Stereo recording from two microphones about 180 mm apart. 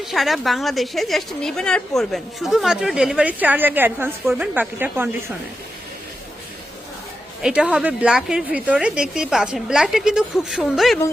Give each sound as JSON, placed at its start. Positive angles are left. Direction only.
{"t": 0.0, "sound": "a woman's voice", "side_deg": 0}
{"t": 7.4, "sound": "speech", "side_deg": -5}